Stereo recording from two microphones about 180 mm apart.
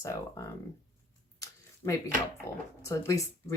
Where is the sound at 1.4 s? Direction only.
20° left (ahead or behind).